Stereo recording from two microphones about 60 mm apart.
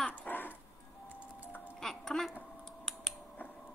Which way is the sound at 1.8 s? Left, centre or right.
Centre.